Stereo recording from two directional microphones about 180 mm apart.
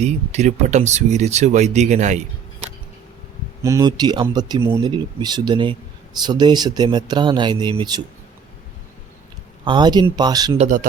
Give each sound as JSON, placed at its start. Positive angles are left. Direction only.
{"t": 0.0, "sound": "speech", "side_deg": -40}
{"t": 3.6, "sound": "speech", "side_deg": -20}
{"t": 9.6, "sound": "speech", "side_deg": -25}
{"t": 10.6, "sound": "speech", "side_deg": -45}